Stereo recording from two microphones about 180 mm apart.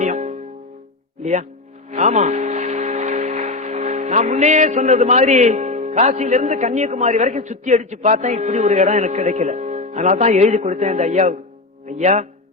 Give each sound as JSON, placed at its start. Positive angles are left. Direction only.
{"t": 0.0, "sound": "music", "side_deg": -40}
{"t": 1.2, "sound": "speech", "side_deg": -40}